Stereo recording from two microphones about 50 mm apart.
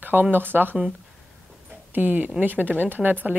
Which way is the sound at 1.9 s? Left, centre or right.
Right.